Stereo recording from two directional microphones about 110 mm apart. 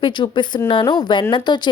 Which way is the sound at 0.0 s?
45° left (ahead or behind).